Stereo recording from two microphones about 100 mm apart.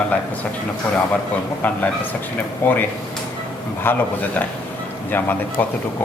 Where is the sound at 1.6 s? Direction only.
15° left (ahead or behind).